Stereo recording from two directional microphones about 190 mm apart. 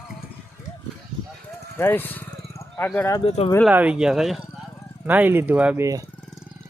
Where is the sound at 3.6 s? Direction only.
5° right (ahead or behind).